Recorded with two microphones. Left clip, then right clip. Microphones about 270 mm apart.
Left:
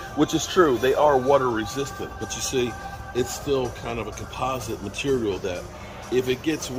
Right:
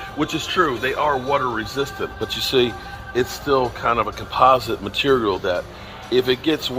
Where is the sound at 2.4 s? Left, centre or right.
Centre.